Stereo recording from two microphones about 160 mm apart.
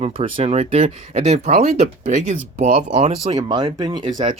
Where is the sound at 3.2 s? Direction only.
25° right (ahead or behind).